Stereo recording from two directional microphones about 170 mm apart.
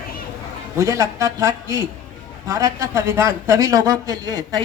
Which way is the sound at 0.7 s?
20° right (ahead or behind).